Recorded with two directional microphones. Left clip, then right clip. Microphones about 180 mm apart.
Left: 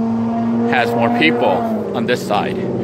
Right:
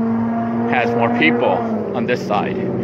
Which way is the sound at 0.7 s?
20° left (ahead or behind).